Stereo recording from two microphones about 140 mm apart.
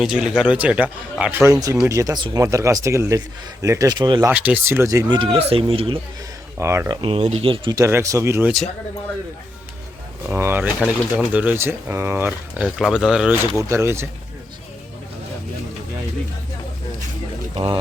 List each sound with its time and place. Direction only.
0.0 s speech: 5° right (ahead or behind); by 4.3 s 30° right (ahead or behind)
4.3 s speech: 10° right (ahead or behind); by 6.0 s 40° right (ahead or behind)
6.6 s speech: 20° right (ahead or behind); by 7.8 s 35° right (ahead or behind)
7.8 s speech: 20° right (ahead or behind)
10.2 s speech: 15° right (ahead or behind)
13.6 s speech: 20° right (ahead or behind)
17.5 s speech: 40° right (ahead or behind)